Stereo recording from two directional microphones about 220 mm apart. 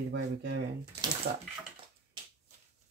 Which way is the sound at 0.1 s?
50° right (ahead or behind).